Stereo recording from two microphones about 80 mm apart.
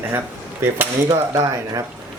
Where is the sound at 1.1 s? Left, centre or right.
Right.